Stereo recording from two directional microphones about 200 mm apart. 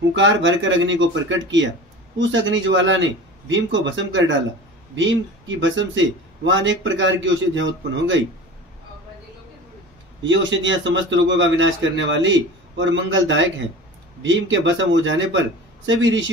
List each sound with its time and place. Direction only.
0.1 s a man's voice: 70° right (ahead or behind)
5.6 s a man's voice: 70° right (ahead or behind)
10.2 s a man's voice: 70° right (ahead or behind)